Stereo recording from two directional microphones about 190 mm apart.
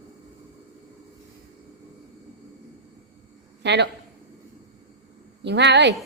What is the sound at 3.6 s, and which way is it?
Speech, 65° right (ahead or behind).